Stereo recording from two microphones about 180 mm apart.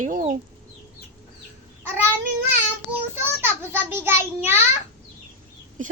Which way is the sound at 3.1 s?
10° right (ahead or behind).